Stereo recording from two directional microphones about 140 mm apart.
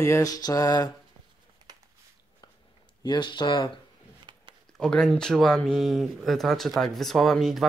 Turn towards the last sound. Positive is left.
turn(degrees=0)  # may be behind; listen again after turning